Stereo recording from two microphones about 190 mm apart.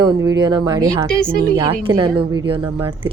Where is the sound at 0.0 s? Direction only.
20° right (ahead or behind).